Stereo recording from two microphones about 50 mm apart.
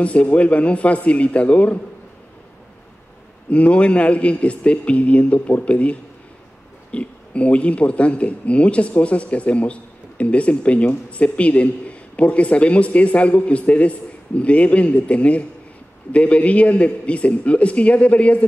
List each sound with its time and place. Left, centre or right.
0.0 s a man's voice: left
3.4 s a man's voice: left